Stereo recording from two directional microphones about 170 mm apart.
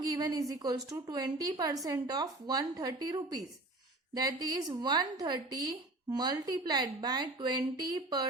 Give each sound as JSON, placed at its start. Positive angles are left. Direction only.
{"t": 0.1, "sound": "a woman's voice", "side_deg": -20}